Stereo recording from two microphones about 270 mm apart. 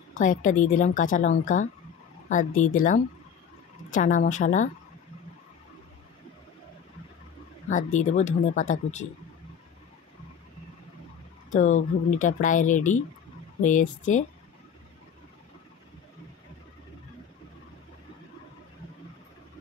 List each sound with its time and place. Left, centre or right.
0.1 s speech: left
7.7 s speech: left
11.5 s speech: left